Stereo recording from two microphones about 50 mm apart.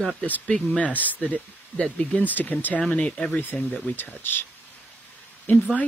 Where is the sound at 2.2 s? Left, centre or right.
Left.